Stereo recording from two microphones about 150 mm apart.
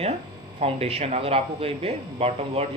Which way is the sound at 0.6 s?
40° right (ahead or behind).